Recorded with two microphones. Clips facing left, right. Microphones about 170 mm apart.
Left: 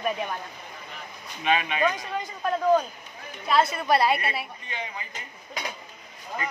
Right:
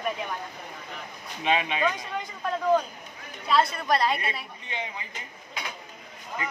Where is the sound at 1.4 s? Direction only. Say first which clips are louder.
Even; 25° right (ahead or behind).